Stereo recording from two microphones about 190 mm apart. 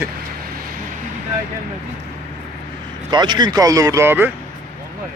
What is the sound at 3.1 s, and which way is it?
Speech, 20° right (ahead or behind).